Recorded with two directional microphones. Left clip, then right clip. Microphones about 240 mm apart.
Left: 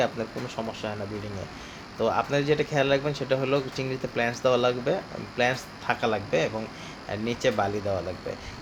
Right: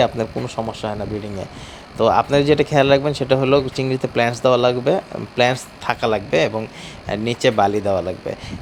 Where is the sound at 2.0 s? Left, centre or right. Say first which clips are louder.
Right 10 dB; right.